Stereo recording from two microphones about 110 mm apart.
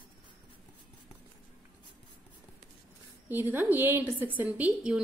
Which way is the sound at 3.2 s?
15° right (ahead or behind).